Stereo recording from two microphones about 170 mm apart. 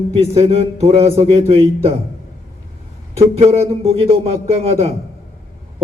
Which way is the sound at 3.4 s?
35° right (ahead or behind).